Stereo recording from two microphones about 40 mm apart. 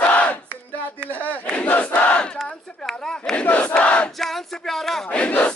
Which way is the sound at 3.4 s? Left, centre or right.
Left.